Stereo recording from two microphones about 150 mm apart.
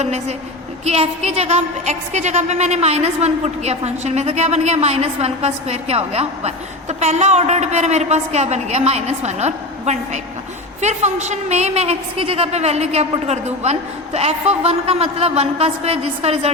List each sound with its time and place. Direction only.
0.0 s a woman's voice: 50° right (ahead or behind)